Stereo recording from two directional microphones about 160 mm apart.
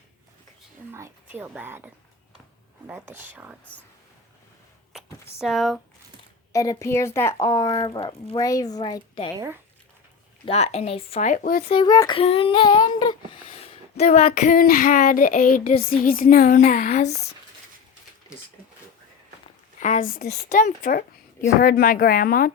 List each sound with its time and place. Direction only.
0.9 s a woman's voice: 15° right (ahead or behind)
5.4 s speech: centre (ahead or behind)
6.5 s speech: 20° left (ahead or behind)
8.4 s speech: 20° left (ahead or behind)
10.4 s speech: 40° left (ahead or behind)
11.3 s child singing: 60° left (ahead or behind)
11.7 s speech: 30° left (ahead or behind)
11.9 s child singing: 30° left (ahead or behind)
14.5 s child singing: 65° left (ahead or behind)
19.8 s a woman's voice: 55° left (ahead or behind)
21.4 s child singing: 60° left (ahead or behind)